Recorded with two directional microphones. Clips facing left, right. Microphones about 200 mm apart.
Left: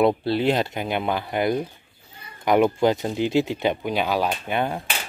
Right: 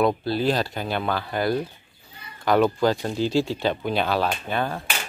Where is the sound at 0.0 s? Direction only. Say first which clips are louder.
Left 2 dB; 25° left (ahead or behind).